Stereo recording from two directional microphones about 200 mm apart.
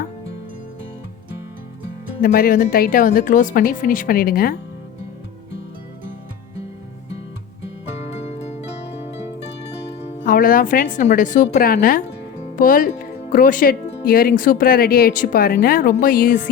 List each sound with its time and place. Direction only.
2.2 s speech: 45° left (ahead or behind)
10.0 s a woman's voice: 40° left (ahead or behind)